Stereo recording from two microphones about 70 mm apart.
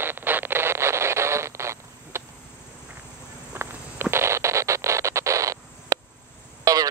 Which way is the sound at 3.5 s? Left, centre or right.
Right.